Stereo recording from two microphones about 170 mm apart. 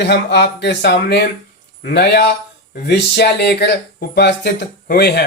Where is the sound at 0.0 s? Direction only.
80° left.